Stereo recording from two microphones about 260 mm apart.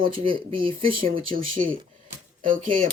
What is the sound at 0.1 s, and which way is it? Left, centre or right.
Speech, centre.